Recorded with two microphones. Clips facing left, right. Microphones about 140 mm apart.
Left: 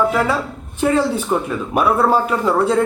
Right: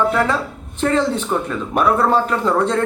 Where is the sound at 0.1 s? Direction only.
5° left (ahead or behind).